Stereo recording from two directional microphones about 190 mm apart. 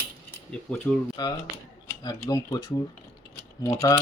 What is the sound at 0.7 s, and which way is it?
Speech, 5° left (ahead or behind).